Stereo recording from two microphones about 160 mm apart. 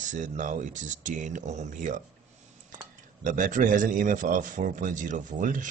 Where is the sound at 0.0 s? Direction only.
50° right (ahead or behind).